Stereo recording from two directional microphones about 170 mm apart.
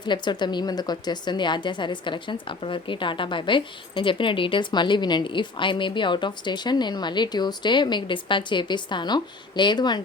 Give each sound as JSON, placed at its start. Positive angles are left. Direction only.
{"t": 0.0, "sound": "speech", "side_deg": 25}